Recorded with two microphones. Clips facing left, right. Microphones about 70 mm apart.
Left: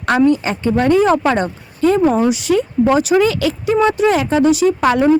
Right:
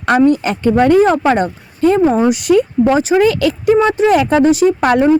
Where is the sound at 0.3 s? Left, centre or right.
Right.